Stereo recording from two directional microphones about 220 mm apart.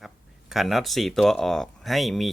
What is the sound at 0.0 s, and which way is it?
Speech, centre (ahead or behind).